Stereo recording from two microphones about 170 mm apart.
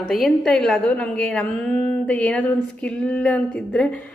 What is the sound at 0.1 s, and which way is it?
A woman's voice, centre (ahead or behind).